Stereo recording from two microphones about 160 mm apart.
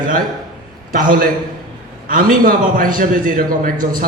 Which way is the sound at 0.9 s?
60° right (ahead or behind).